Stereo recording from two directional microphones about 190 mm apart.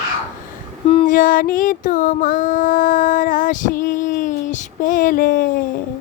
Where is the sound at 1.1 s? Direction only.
45° left (ahead or behind).